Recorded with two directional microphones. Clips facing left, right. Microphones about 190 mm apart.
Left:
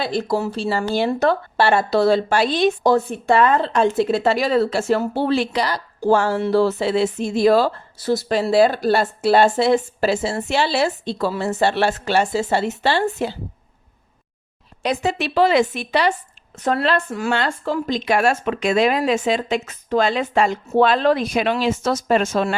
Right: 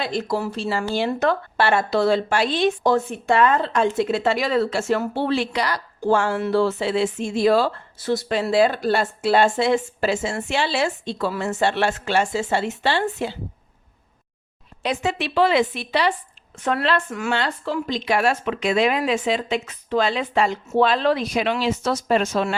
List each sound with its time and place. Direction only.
0.0 s speech: 30° left (ahead or behind)
14.8 s speech: 40° left (ahead or behind)
17.3 s speech: 50° left (ahead or behind)